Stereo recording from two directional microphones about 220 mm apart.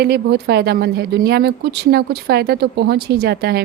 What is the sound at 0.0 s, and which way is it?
A woman's voice, 45° right (ahead or behind).